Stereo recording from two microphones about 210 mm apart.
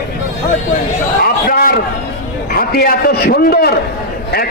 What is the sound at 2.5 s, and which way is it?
A man's voice, 45° left (ahead or behind).